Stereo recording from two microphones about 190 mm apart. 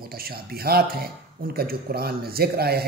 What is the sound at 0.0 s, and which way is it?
A man's voice, 50° right (ahead or behind).